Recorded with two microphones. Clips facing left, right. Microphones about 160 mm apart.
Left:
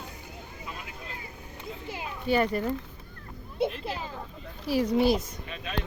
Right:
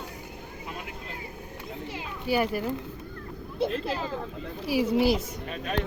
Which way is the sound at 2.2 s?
5° right (ahead or behind).